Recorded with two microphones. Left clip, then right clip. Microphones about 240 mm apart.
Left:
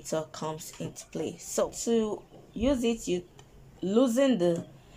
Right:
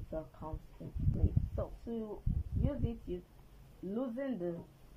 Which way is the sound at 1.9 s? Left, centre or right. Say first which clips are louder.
Left 14 dB; left.